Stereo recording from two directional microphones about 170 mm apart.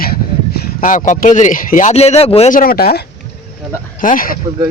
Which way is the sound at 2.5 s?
60° left (ahead or behind).